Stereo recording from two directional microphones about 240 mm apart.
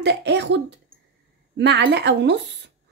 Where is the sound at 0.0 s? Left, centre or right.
Right.